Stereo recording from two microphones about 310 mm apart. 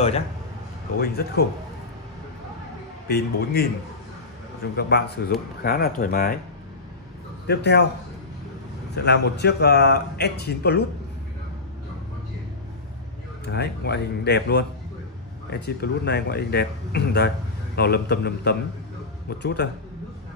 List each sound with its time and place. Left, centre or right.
0.9 s speech: left
3.1 s speech: left
4.7 s speech: left
7.4 s speech: left
8.9 s speech: left
13.5 s speech: left